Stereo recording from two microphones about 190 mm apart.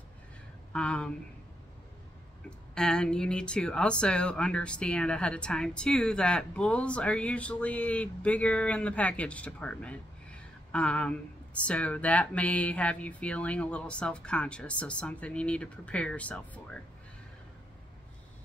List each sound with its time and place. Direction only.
0.7 s speech: 5° left (ahead or behind)
2.7 s speech: 5° left (ahead or behind)